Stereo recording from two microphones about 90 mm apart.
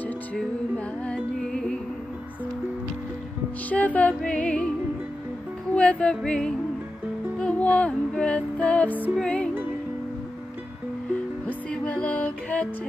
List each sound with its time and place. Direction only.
0.4 s music: 10° left (ahead or behind)
3.6 s music: 15° left (ahead or behind)
5.8 s music: 15° left (ahead or behind)
11.4 s music: 15° left (ahead or behind)